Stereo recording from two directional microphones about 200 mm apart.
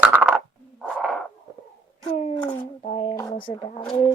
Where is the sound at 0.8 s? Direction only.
Centre (ahead or behind).